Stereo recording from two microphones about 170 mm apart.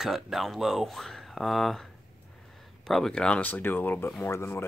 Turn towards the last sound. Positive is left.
turn(degrees=15)  # may be behind; listen again after turning